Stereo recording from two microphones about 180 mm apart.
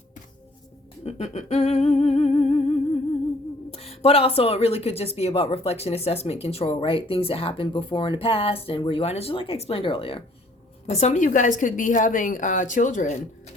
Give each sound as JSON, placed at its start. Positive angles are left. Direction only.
{"t": 1.0, "sound": "speech", "side_deg": 35}